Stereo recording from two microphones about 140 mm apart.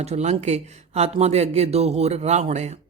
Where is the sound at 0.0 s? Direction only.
50° right (ahead or behind).